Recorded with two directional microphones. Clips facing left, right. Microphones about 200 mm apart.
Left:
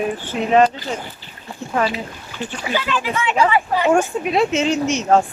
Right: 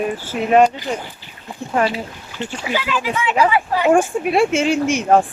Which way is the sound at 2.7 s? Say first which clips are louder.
Even; 5° right (ahead or behind).